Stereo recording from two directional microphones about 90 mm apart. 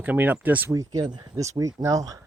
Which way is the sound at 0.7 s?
40° right (ahead or behind).